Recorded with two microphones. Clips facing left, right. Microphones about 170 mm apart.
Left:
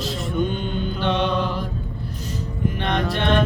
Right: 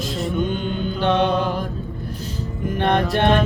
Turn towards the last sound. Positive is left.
turn(degrees=-50)  # may be behind; listen again after turning